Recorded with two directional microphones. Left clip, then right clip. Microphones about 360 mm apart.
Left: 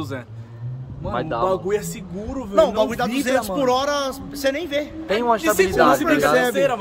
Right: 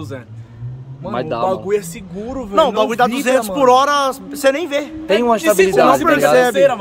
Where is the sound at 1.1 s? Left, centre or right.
Right.